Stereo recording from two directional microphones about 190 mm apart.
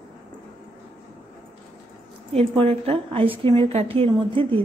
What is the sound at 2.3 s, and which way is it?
A woman's voice, 30° right (ahead or behind).